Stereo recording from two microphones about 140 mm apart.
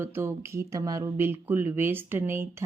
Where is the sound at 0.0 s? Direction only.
20° right (ahead or behind).